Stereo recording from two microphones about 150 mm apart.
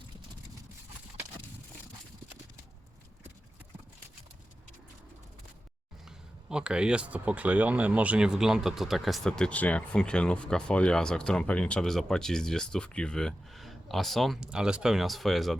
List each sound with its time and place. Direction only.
6.1 s speech: 5° right (ahead or behind)